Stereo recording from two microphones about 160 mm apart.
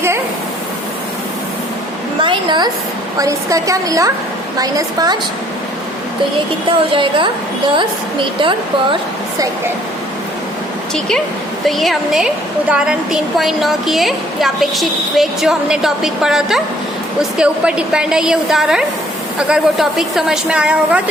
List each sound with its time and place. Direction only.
2.2 s a woman's voice: 30° right (ahead or behind)
6.7 s a woman's voice: 30° right (ahead or behind)
11.6 s a woman's voice: centre (ahead or behind)